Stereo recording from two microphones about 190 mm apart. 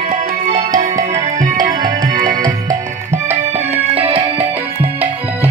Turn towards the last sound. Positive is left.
turn(degrees=-30)  # may be behind; listen again after turning